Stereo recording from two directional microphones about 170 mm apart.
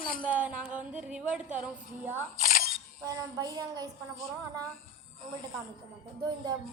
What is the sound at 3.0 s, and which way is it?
Speech, 20° right (ahead or behind).